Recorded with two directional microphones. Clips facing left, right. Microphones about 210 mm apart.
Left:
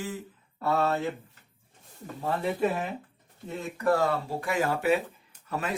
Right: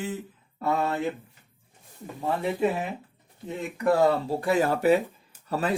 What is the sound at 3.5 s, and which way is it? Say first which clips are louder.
Speech: right 2 dB; 20° right (ahead or behind).